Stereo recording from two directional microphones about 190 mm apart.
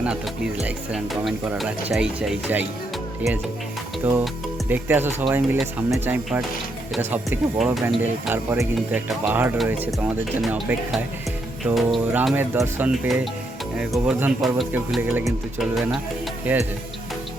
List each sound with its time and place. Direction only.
0.0 s speech: 5° right (ahead or behind)
4.0 s speech: 10° right (ahead or behind)
8.3 s speech: 10° right (ahead or behind)